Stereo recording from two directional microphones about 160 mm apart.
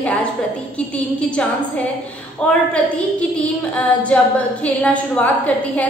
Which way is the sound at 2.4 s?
10° left (ahead or behind).